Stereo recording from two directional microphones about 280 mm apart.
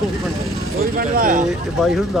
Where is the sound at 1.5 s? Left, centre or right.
Centre.